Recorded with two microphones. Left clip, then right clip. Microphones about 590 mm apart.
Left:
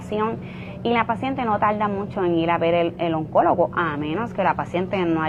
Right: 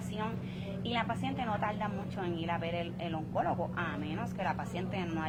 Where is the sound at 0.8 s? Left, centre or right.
Left.